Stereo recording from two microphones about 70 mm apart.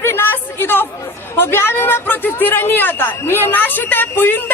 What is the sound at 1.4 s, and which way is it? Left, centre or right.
Speech, left.